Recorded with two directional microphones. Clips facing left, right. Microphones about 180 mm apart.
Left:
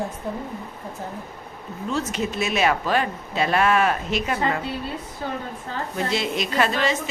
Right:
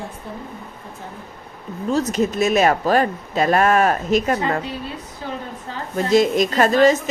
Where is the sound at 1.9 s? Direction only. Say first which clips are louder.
Right 6 dB; 40° right (ahead or behind).